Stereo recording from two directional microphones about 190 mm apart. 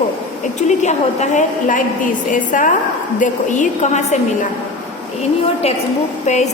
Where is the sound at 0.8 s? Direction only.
40° left (ahead or behind).